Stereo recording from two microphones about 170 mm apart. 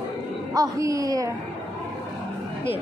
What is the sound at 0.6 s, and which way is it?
Speech, 20° right (ahead or behind).